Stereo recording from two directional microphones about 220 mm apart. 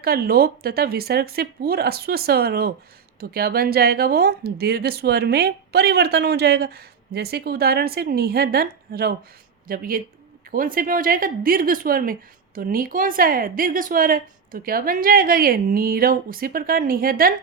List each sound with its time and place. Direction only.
0.0 s a woman's voice: 45° right (ahead or behind)